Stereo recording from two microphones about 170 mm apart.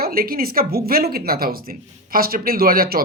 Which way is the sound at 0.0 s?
60° right (ahead or behind).